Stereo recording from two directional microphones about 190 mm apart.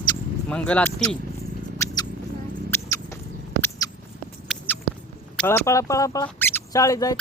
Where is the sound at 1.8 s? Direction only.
15° left (ahead or behind).